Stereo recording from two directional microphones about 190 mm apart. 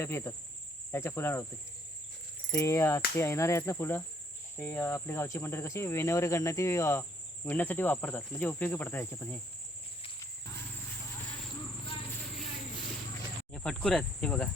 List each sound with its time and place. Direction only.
0.0 s speech: 15° left (ahead or behind)
2.5 s speech: 15° left (ahead or behind)
13.5 s cricket: 5° left (ahead or behind)